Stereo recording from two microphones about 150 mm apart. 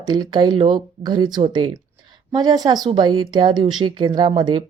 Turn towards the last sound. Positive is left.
turn(degrees=-30)  # may be behind; listen again after turning